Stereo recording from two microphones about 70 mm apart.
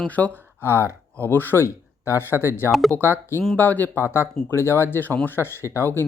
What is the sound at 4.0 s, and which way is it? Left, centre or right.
Speech, left.